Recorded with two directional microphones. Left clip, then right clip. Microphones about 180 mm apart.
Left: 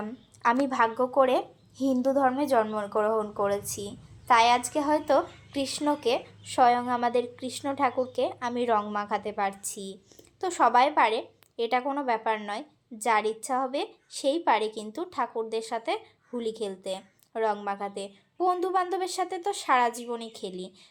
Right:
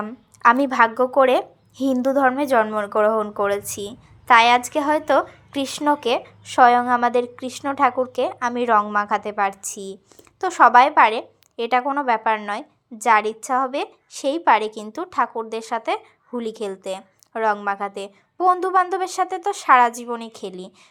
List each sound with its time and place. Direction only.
0.6 s a woman's voice: 30° right (ahead or behind)